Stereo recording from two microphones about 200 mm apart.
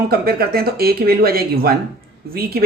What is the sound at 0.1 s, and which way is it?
A man's voice, 50° right (ahead or behind).